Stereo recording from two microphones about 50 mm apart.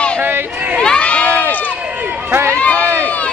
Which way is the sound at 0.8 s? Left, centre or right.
Left.